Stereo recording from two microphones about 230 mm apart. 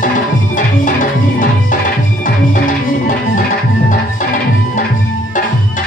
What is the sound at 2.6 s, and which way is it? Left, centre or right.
Music, left.